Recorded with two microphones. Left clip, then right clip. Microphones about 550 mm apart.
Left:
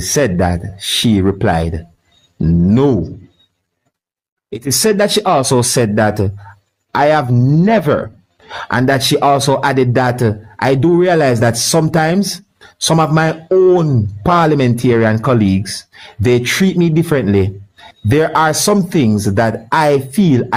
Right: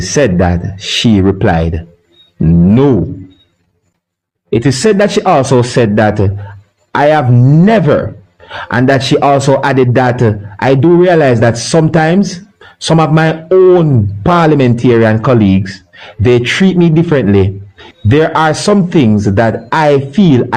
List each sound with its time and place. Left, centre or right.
0.1 s a man's voice: left
4.4 s a man's voice: left